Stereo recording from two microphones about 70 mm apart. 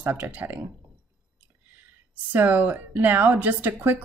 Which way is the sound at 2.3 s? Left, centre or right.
Right.